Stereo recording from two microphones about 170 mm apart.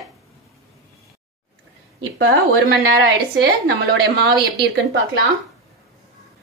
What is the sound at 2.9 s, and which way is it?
A woman's voice, 85° right.